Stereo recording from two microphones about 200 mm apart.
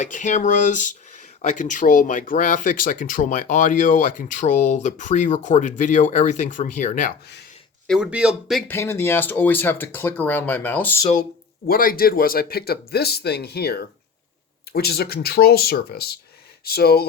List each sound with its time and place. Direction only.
0.0 s speech: 40° left (ahead or behind)
7.9 s speech: 5° right (ahead or behind)
8.7 s speech: 10° left (ahead or behind)
11.7 s speech: 45° left (ahead or behind)